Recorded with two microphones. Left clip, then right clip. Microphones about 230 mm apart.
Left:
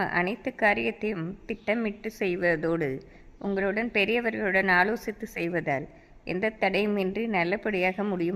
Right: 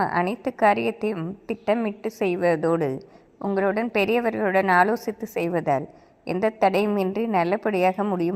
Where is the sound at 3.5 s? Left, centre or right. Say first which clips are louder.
Right 4 dB; centre.